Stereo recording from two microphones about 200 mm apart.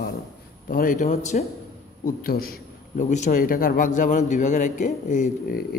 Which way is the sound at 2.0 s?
45° left (ahead or behind).